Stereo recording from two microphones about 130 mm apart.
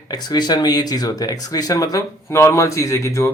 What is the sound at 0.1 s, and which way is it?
Speech, 35° left (ahead or behind).